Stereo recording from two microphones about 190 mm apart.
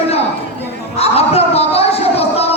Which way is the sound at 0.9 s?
35° left (ahead or behind).